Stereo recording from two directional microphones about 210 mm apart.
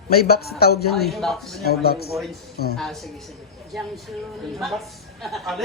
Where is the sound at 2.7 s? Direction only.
Centre (ahead or behind).